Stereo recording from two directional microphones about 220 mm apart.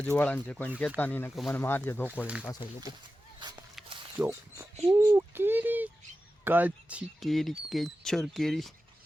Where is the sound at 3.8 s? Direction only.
Centre (ahead or behind).